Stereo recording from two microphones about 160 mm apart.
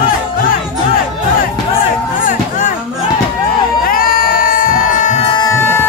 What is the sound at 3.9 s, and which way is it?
Music, 65° left (ahead or behind).